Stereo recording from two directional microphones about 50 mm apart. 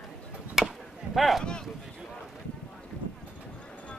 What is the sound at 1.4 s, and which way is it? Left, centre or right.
Speech, centre.